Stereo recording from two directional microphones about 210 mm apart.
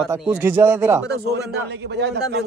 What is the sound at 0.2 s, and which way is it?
Speech, 10° right (ahead or behind).